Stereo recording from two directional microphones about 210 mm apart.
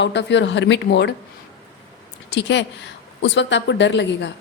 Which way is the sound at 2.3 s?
55° left (ahead or behind).